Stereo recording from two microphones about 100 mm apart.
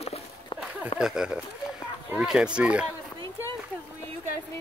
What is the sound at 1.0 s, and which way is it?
Speech, 5° right (ahead or behind).